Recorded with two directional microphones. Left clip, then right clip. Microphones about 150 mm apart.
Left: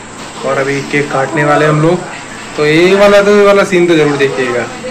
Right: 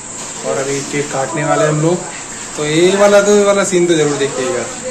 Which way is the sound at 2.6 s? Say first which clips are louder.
Left 4 dB; 10° right (ahead or behind).